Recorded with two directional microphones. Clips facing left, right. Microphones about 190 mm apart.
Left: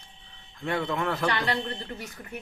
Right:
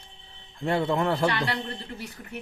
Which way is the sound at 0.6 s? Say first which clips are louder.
Right 4 dB; 30° right (ahead or behind).